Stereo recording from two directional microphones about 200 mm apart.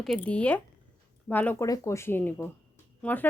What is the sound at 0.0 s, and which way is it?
Speech, 5° left (ahead or behind).